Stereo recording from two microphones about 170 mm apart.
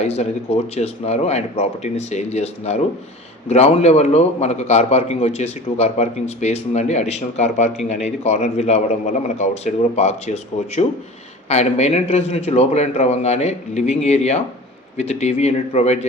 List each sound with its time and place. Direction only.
0.0 s a man's voice: 40° left (ahead or behind)